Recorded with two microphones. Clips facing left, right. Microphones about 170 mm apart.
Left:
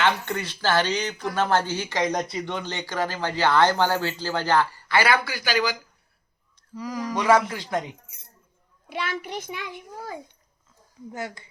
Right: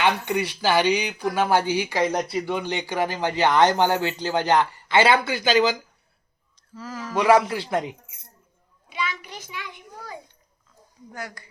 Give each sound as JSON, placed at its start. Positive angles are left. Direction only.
{"t": 0.0, "sound": "speech", "side_deg": -15}
{"t": 6.7, "sound": "speech", "side_deg": 15}
{"t": 8.9, "sound": "a child's voice", "side_deg": 60}
{"t": 11.1, "sound": "speech", "side_deg": 25}